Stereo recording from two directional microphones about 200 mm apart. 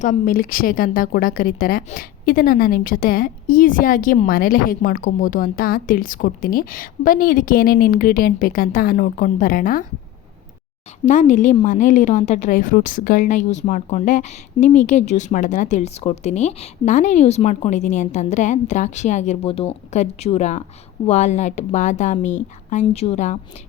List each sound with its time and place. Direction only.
0.0 s speech: 40° left (ahead or behind)
11.0 s a woman's voice: 35° left (ahead or behind)